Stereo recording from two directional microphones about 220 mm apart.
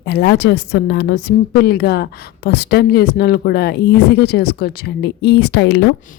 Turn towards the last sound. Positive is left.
turn(degrees=50)  # may be behind; listen again after turning